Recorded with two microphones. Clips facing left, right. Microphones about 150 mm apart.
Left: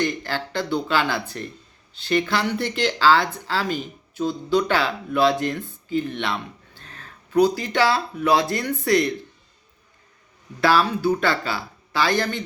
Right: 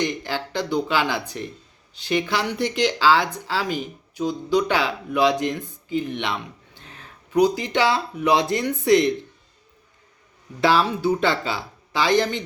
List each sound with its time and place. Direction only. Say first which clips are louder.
0.0 s speech: even; 15° right (ahead or behind)
10.6 s speech: even; 20° right (ahead or behind)